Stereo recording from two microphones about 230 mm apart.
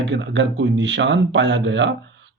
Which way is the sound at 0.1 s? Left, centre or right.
Right.